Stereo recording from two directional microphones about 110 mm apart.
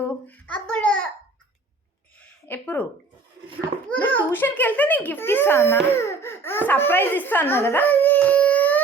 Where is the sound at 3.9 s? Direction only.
15° left (ahead or behind).